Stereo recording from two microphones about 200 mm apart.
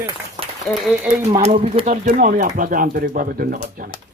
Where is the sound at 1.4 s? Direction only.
30° right (ahead or behind); by 3.9 s 45° right (ahead or behind).